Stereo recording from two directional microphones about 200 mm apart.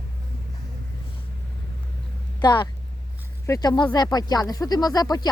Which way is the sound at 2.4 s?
20° left (ahead or behind).